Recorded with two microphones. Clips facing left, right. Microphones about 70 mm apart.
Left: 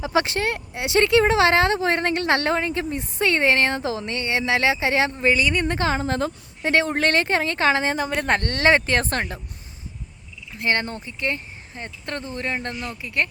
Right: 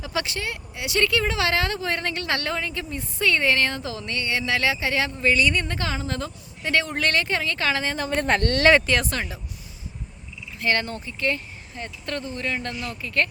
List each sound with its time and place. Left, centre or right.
0.0 s speech: left
5.3 s a woman's voice: centre
5.6 s speech: left
7.9 s a woman's voice: centre
8.3 s speech: left
10.6 s speech: left
13.0 s speech: centre